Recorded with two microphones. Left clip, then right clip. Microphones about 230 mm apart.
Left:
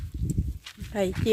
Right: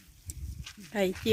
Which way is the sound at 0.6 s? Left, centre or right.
Centre.